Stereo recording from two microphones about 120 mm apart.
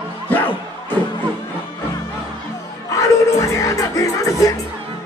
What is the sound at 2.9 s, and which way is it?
Music, 25° left (ahead or behind).